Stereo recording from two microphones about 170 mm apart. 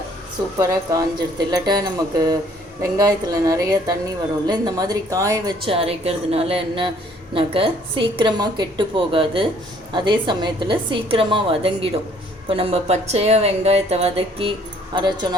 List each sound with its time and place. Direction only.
0.6 s a woman's voice: 20° right (ahead or behind)
5.6 s a woman's voice: 35° right (ahead or behind)